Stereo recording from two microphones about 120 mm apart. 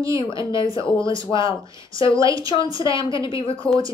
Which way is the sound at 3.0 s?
45° left (ahead or behind).